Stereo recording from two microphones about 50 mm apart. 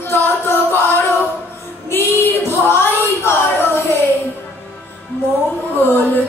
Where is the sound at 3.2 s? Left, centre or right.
Left.